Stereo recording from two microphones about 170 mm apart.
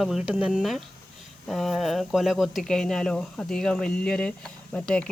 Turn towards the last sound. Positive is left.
turn(degrees=5)  # may be behind; listen again after turning